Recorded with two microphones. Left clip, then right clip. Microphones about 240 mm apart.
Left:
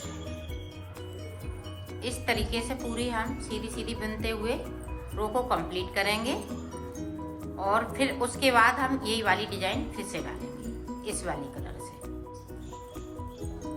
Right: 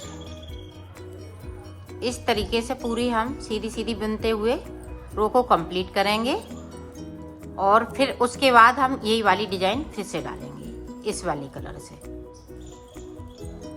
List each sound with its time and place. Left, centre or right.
2.0 s a woman's voice: right
7.6 s a woman's voice: right